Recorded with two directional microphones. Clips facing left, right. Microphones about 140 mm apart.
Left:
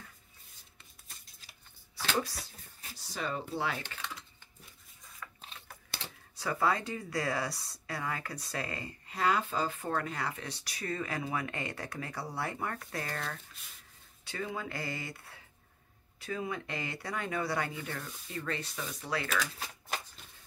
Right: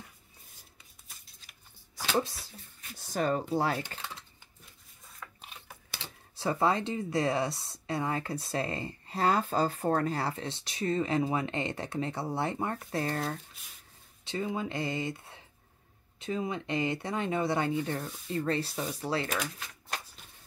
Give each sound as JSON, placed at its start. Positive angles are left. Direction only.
{"t": 2.1, "sound": "speech", "side_deg": -30}
{"t": 3.0, "sound": "speech", "side_deg": -45}
{"t": 5.2, "sound": "typewriter", "side_deg": -10}
{"t": 6.3, "sound": "speech", "side_deg": -30}
{"t": 19.9, "sound": "shuffling cards", "side_deg": 0}